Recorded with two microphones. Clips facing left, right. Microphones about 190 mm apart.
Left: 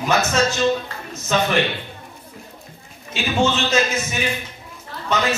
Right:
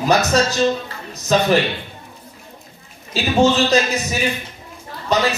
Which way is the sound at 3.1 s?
35° right (ahead or behind).